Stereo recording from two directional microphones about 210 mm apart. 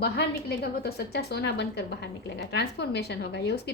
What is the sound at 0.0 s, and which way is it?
A woman's voice, 50° left (ahead or behind).